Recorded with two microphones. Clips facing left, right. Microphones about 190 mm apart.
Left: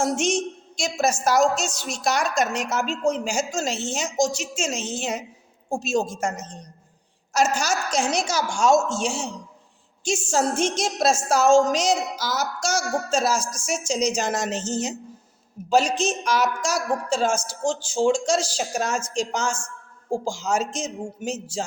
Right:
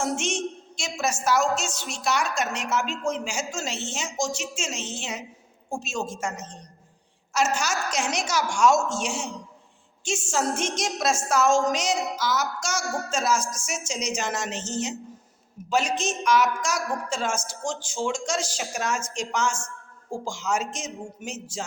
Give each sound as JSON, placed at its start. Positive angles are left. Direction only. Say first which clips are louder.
{"t": 0.0, "sound": "speech", "louder": "left 4 dB", "side_deg": 35}
{"t": 6.3, "sound": "a woman's voice", "louder": "left 2 dB", "side_deg": 0}
{"t": 7.3, "sound": "speech", "louder": "left 3 dB", "side_deg": 40}
{"t": 9.0, "sound": "speech", "louder": "left 3 dB", "side_deg": 30}